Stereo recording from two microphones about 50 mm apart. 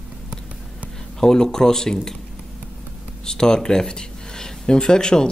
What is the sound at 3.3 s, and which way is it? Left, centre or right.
Speech, centre.